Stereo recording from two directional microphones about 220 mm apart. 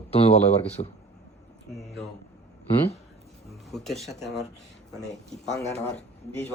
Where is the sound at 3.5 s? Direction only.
Centre (ahead or behind).